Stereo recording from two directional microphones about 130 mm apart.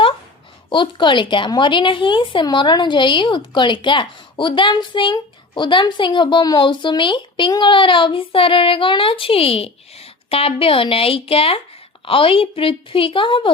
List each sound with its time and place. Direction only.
0.7 s a woman's voice: 40° left (ahead or behind)